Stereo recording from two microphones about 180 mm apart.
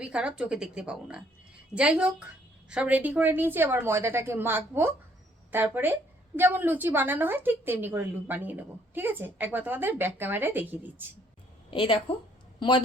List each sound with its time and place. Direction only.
0.0 s a woman's voice: 5° right (ahead or behind)
11.7 s a woman's voice: 30° left (ahead or behind)